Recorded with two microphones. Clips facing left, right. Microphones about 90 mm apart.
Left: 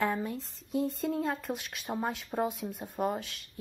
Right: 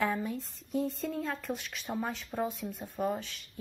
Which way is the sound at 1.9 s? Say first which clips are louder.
Left 2 dB; 15° left (ahead or behind).